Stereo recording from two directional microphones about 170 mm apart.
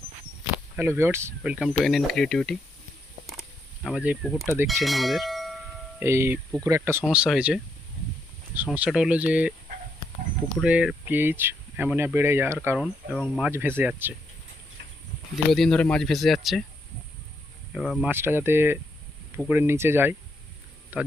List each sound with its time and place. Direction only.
0.5 s speech: 15° right (ahead or behind); by 2.6 s 5° left (ahead or behind)
3.8 s speech: 5° right (ahead or behind)
6.0 s speech: 15° right (ahead or behind)
7.0 s speech: 5° right (ahead or behind)
10.6 s speech: 5° right (ahead or behind)
15.4 s speech: centre (ahead or behind)
17.7 s speech: centre (ahead or behind)
18.1 s speech: 15° right (ahead or behind)